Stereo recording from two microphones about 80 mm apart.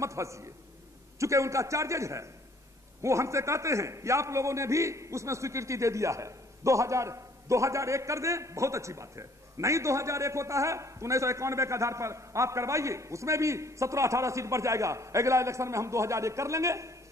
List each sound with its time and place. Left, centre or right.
0.0 s a man's voice: right